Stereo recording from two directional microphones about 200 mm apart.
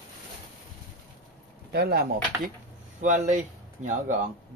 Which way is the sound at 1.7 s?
50° right (ahead or behind).